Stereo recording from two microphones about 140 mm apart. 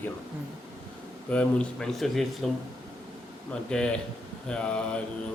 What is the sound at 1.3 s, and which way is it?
A man's voice, 5° left (ahead or behind).